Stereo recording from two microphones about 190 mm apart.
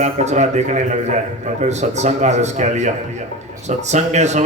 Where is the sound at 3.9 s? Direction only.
35° right (ahead or behind).